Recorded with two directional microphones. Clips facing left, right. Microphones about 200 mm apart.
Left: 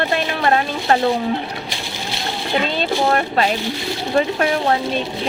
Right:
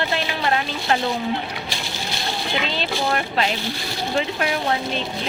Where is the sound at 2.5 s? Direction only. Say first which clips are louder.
Left 7 dB; 45° left (ahead or behind).